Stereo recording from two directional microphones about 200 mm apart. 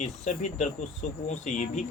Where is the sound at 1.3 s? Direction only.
40° left (ahead or behind).